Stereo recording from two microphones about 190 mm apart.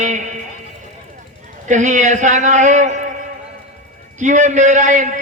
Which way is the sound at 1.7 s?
40° right (ahead or behind).